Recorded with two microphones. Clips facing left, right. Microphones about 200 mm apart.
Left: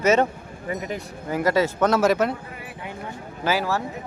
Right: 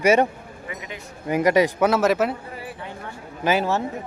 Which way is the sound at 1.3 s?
15° right (ahead or behind).